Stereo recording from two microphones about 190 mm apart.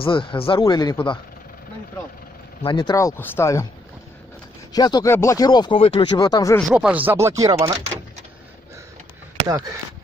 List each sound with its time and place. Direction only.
0.0 s speech: 25° left (ahead or behind)
2.6 s speech: 25° left (ahead or behind)
4.7 s speech: 20° left (ahead or behind)
6.7 s speech: 5° right (ahead or behind)